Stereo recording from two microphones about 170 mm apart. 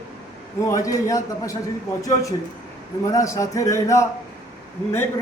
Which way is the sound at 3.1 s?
20° left (ahead or behind).